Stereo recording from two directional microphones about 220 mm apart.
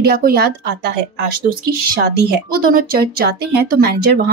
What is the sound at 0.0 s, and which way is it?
Speech, 45° right (ahead or behind).